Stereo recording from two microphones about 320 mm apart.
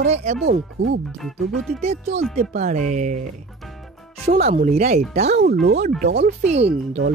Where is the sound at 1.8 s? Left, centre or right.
Centre.